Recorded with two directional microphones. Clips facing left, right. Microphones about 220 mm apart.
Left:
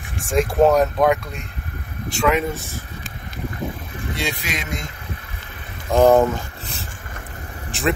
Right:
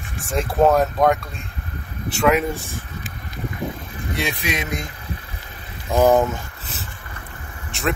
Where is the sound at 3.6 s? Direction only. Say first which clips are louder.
Right 1 dB; 15° right (ahead or behind).